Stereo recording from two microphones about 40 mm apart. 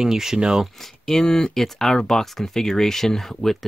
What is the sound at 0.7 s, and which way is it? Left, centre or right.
Speech, centre.